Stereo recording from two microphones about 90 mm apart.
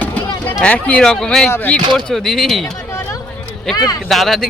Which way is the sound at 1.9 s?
5° left (ahead or behind).